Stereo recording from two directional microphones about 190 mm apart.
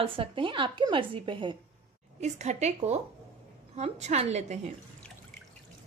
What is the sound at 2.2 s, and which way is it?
A woman's voice, 35° right (ahead or behind).